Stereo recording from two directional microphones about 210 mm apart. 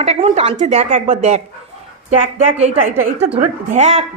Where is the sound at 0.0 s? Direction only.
30° right (ahead or behind).